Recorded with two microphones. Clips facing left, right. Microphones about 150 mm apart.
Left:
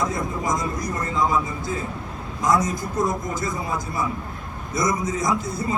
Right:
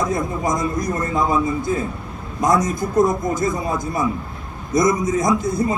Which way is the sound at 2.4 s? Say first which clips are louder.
Right 3 dB; 50° right (ahead or behind).